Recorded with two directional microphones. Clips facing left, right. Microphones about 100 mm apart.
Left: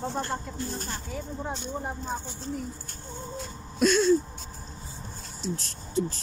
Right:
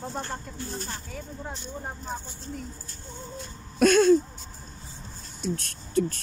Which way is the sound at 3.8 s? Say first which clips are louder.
Right 3 dB; 55° right (ahead or behind).